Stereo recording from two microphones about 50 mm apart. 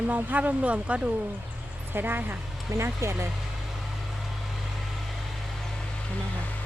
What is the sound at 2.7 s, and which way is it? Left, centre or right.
Speech, right.